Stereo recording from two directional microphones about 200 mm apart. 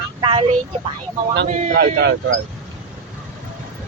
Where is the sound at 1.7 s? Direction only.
55° right (ahead or behind).